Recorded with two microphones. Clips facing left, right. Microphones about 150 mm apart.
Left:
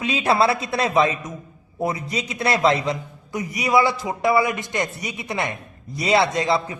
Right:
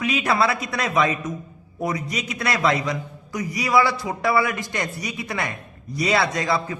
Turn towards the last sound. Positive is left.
turn(degrees=25)  # may be behind; listen again after turning